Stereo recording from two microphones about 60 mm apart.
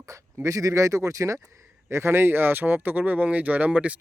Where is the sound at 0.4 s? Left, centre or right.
Right.